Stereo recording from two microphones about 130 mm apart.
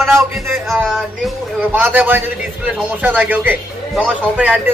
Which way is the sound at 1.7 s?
15° right (ahead or behind).